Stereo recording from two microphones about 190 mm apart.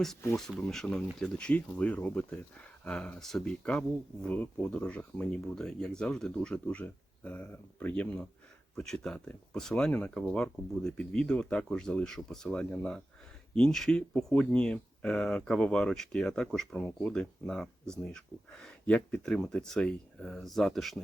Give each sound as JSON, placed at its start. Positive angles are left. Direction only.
{"t": 0.3, "sound": "speech", "side_deg": 0}